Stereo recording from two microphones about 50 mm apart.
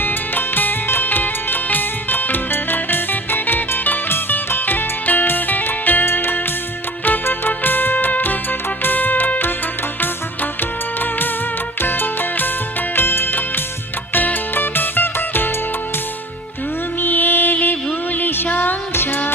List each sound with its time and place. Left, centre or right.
0.0 s music: left
10.6 s music: left
17.0 s music: left